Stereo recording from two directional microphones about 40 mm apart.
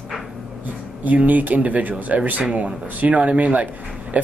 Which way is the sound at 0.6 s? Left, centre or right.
Right.